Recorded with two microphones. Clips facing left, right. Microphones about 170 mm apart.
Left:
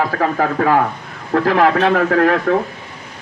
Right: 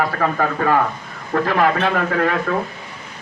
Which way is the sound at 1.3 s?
90° left.